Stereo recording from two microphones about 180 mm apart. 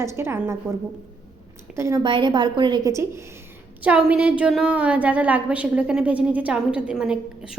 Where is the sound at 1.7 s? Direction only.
15° right (ahead or behind).